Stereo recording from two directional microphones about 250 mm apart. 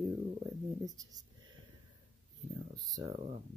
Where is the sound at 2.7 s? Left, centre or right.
Centre.